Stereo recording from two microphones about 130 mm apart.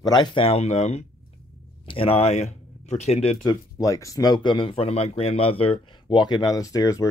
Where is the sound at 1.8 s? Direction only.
45° left (ahead or behind).